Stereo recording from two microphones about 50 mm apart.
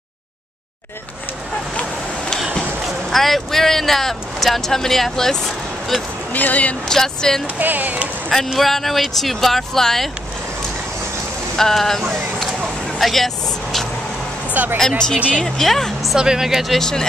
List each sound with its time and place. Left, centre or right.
3.1 s speech: centre
6.3 s speech: left
6.9 s speech: centre
7.5 s speech: right
8.5 s speech: centre
11.5 s speech: centre
13.0 s speech: centre
14.5 s speech: right
14.8 s speech: centre
15.1 s speech: right
15.4 s speech: centre
16.2 s speech: centre